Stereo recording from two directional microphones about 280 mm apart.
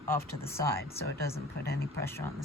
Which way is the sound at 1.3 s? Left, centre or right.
Left.